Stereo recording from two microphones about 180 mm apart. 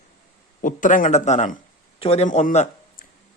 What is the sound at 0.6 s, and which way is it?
Speech, 45° left (ahead or behind).